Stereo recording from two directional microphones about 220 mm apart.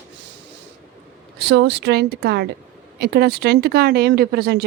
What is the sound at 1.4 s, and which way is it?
Speech, 50° right (ahead or behind).